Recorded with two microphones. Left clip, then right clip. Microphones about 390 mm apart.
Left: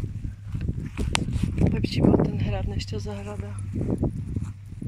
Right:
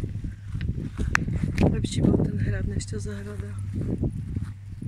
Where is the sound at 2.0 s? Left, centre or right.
Left.